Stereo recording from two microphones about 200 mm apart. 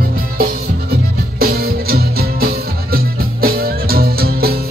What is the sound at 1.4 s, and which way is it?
Music, 50° right (ahead or behind).